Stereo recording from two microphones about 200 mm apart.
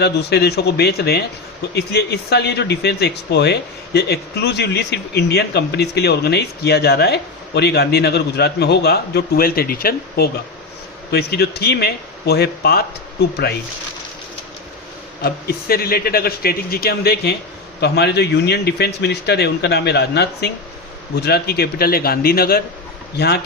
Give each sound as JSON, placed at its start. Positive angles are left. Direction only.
{"t": 0.0, "sound": "a man's voice", "side_deg": 55}
{"t": 15.2, "sound": "a man's voice", "side_deg": 50}